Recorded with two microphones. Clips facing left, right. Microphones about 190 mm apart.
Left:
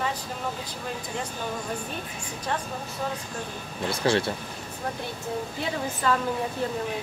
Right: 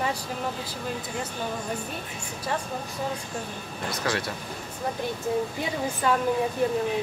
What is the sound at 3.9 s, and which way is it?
Speech, 30° left (ahead or behind).